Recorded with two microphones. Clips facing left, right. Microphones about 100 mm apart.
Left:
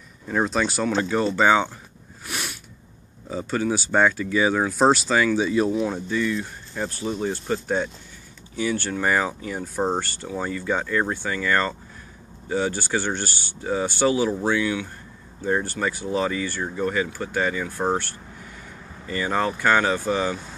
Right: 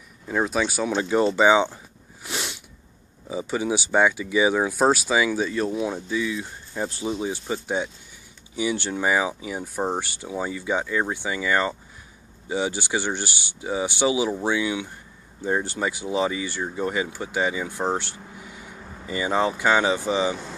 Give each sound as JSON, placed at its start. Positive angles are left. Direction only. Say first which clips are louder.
{"t": 0.3, "sound": "speech", "louder": "left 1 dB", "side_deg": -5}
{"t": 1.0, "sound": "speech", "louder": "right 3 dB", "side_deg": -20}
{"t": 2.2, "sound": "sneeze", "louder": "right 1 dB", "side_deg": -25}
{"t": 3.3, "sound": "speech", "louder": "left 1 dB", "side_deg": -10}
{"t": 5.5, "sound": "speech", "louder": "left 4 dB", "side_deg": 10}
{"t": 5.8, "sound": "speech", "louder": "left 2 dB", "side_deg": -5}
{"t": 6.4, "sound": "speech", "louder": "even", "side_deg": -15}
{"t": 9.0, "sound": "speech", "louder": "right 1 dB", "side_deg": -10}